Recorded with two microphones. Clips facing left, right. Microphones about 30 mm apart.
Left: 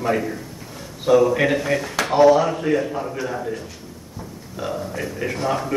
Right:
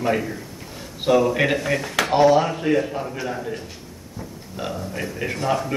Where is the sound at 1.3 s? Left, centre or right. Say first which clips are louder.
Left 1 dB; centre.